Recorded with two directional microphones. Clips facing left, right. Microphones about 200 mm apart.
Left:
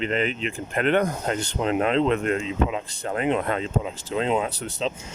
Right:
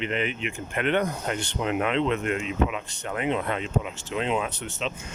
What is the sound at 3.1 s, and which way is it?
Speech, 45° left (ahead or behind).